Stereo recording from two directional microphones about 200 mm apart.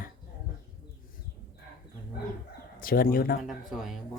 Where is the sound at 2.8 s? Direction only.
45° left (ahead or behind).